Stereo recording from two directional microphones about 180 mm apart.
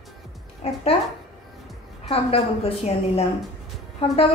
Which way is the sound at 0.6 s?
35° left (ahead or behind).